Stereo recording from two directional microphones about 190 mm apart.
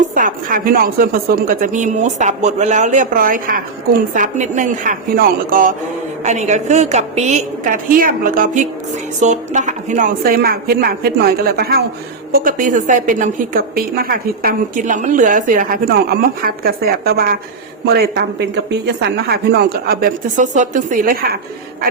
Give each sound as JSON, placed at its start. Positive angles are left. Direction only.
{"t": 0.1, "sound": "a woman's voice", "side_deg": -45}